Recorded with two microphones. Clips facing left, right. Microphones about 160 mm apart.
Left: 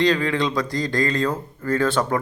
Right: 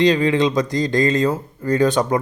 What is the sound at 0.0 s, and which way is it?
Speech, 20° right (ahead or behind).